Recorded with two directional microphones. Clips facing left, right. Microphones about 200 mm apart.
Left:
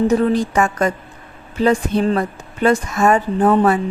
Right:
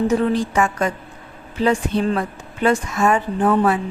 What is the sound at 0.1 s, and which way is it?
A woman's voice, 40° left (ahead or behind).